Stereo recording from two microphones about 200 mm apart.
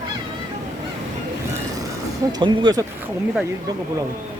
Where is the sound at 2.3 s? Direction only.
20° right (ahead or behind).